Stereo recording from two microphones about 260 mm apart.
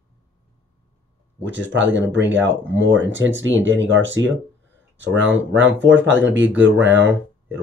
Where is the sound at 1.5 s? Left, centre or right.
Right.